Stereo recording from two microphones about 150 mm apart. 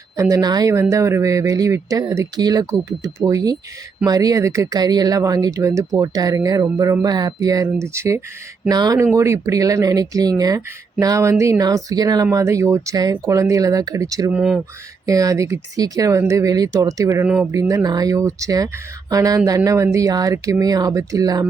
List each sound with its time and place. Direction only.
0.2 s speech: 20° right (ahead or behind)
14.3 s speech: 5° right (ahead or behind)
15.0 s speech: 20° right (ahead or behind)
17.2 s speech: 5° right (ahead or behind)
17.5 s speech: 20° right (ahead or behind)